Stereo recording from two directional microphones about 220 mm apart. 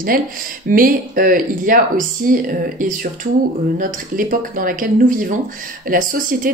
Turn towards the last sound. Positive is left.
turn(degrees=-40)  # may be behind; listen again after turning